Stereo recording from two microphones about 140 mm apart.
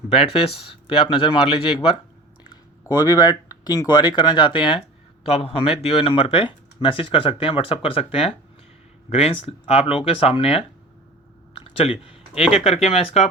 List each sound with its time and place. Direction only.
0.1 s speech: 40° left (ahead or behind)
2.8 s speech: 25° left (ahead or behind); by 13.2 s 45° left (ahead or behind)